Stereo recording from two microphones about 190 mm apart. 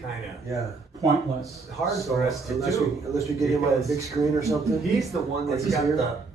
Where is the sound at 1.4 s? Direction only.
Centre (ahead or behind).